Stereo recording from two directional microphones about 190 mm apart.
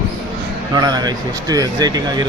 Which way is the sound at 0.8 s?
20° right (ahead or behind).